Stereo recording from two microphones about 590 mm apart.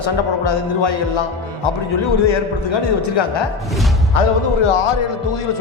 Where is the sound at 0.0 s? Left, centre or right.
Left.